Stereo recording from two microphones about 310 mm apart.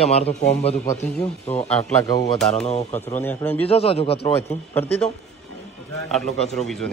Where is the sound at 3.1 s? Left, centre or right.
Centre.